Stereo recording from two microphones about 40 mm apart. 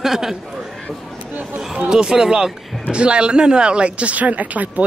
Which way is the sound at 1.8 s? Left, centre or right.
Centre.